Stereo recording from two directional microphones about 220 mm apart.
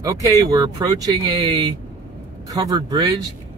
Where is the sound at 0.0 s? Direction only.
15° right (ahead or behind).